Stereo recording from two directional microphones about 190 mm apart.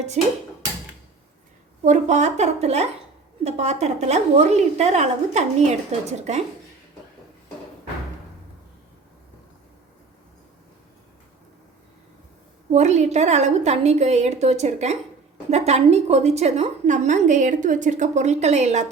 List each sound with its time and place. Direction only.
0.2 s a woman's voice: 35° right (ahead or behind)
1.8 s a woman's voice: 40° right (ahead or behind)
12.7 s a woman's voice: 35° right (ahead or behind)